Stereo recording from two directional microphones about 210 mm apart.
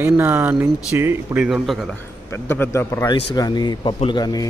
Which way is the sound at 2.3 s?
10° left (ahead or behind).